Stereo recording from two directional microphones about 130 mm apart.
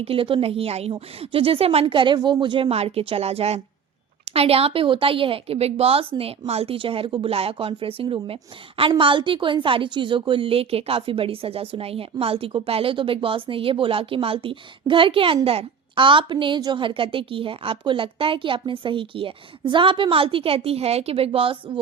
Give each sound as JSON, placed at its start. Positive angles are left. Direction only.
{"t": 0.0, "sound": "a woman's voice", "side_deg": -45}